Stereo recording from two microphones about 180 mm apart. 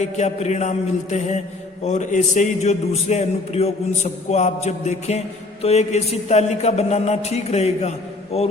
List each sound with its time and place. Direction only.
0.0 s a man's voice: 40° left (ahead or behind)